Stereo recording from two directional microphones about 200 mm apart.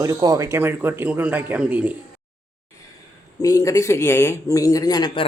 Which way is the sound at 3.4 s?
15° left (ahead or behind).